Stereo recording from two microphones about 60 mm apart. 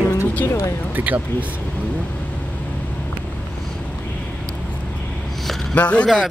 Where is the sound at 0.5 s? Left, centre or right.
Left.